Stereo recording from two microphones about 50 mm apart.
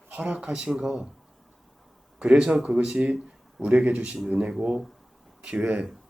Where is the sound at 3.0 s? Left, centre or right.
Centre.